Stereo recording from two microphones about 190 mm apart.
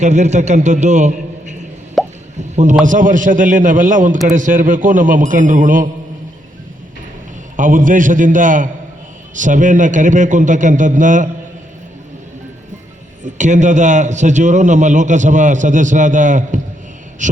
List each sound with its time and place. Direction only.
0.0 s a man's voice: 35° right (ahead or behind)
2.0 s plop: centre (ahead or behind)
2.8 s speech: 45° right (ahead or behind)
7.5 s a man's voice: 45° right (ahead or behind)
13.2 s a man's voice: 40° right (ahead or behind)